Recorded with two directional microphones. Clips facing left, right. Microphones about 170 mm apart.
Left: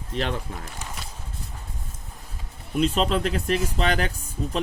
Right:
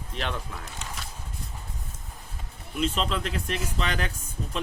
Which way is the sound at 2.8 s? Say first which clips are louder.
Left 5 dB; 40° left (ahead or behind).